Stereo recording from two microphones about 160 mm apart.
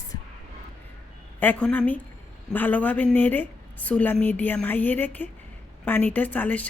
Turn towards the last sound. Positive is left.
turn(degrees=10)  # may be behind; listen again after turning